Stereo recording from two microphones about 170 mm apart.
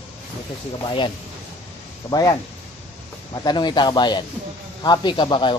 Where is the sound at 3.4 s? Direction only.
25° left (ahead or behind).